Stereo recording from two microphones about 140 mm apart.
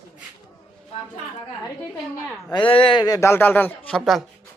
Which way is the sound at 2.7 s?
40° left (ahead or behind).